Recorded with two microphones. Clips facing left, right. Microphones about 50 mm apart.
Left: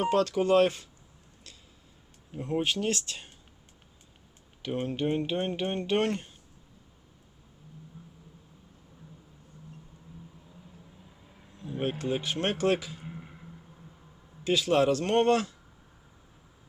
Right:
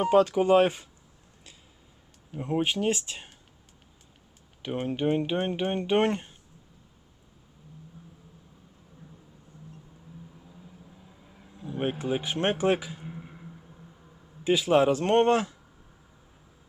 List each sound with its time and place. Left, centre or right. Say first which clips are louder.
0.0 s speech: right 4 dB; centre
2.3 s speech: right 2 dB; centre
4.6 s speech: right 2 dB; centre
11.5 s speech: right 2 dB; centre
13.1 s a sound: right 2 dB; centre
15.1 s speech: right 3 dB; right